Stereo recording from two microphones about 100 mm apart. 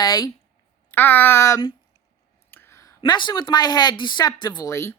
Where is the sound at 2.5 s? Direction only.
25° left (ahead or behind).